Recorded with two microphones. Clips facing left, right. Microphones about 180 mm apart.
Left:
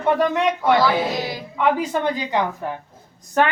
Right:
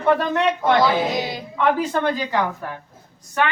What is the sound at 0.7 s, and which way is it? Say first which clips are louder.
Speech: even; 20° right (ahead or behind).